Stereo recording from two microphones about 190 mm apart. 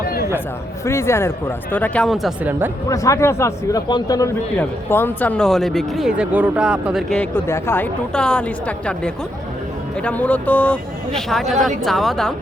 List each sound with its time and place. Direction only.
0.9 s speech: 15° left (ahead or behind); by 2.6 s 10° right (ahead or behind)
2.9 s speech: 15° left (ahead or behind); by 12.3 s centre (ahead or behind)